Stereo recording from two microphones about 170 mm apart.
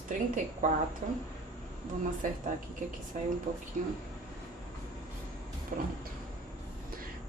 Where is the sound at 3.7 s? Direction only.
50° right (ahead or behind).